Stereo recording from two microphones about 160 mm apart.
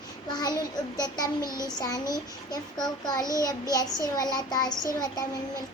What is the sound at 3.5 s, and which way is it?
A child's voice, 25° left (ahead or behind).